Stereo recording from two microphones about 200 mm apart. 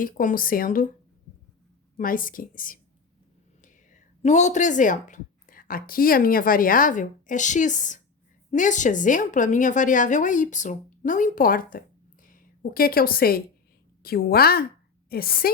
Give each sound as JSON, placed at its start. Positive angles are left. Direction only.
{"t": 0.0, "sound": "a woman's voice", "side_deg": 40}
{"t": 2.0, "sound": "a woman's voice", "side_deg": 45}